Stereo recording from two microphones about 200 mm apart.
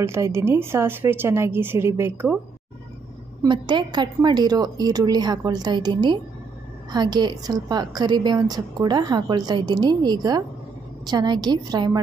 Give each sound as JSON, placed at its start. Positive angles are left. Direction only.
{"t": 0.0, "sound": "a woman's voice", "side_deg": -15}
{"t": 3.4, "sound": "a woman's voice", "side_deg": -20}